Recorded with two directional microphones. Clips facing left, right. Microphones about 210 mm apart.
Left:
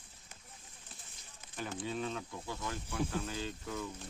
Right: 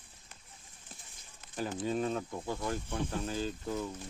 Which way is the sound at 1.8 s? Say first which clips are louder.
Right 6 dB; 40° right (ahead or behind).